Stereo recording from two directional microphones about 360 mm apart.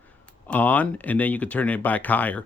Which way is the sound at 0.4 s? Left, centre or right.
Centre.